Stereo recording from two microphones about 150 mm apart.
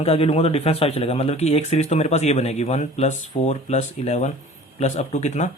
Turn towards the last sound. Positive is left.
turn(degrees=50)  # may be behind; listen again after turning